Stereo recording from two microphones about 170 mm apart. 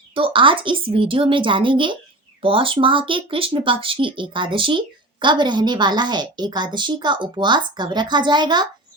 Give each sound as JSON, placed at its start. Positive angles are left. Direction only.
{"t": 0.1, "sound": "a woman's voice", "side_deg": -30}